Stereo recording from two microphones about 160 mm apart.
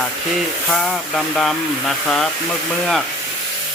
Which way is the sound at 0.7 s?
Centre (ahead or behind).